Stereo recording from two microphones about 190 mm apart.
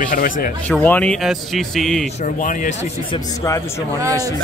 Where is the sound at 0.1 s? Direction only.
50° left (ahead or behind).